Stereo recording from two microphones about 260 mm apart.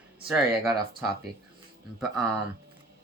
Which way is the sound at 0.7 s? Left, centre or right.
Right.